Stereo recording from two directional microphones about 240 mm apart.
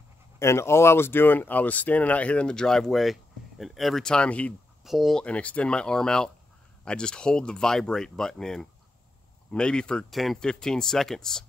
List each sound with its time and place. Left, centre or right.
0.4 s speech: centre